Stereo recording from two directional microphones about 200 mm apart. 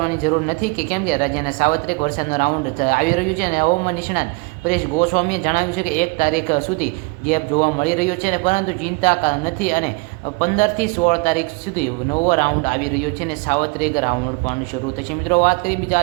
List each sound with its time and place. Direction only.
0.0 s a woman's voice: 40° left (ahead or behind)
15.3 s a woman's voice: 40° left (ahead or behind)